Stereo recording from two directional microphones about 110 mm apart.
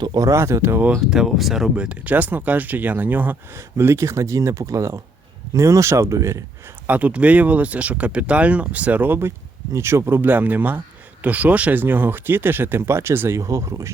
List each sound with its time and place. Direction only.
0.0 s speech: 35° right (ahead or behind); by 0.9 s 20° right (ahead or behind)
0.9 s speech: 5° right (ahead or behind); by 6.4 s 30° right (ahead or behind)
6.8 s speech: 15° right (ahead or behind)